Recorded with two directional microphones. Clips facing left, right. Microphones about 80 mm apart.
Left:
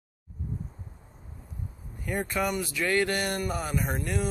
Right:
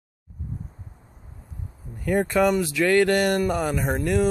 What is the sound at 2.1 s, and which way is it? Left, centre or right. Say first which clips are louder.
Speech: right 9 dB; right.